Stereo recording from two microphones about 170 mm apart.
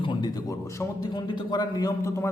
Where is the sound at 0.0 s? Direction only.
25° left (ahead or behind).